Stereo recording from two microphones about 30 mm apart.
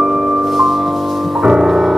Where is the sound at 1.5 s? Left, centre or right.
Centre.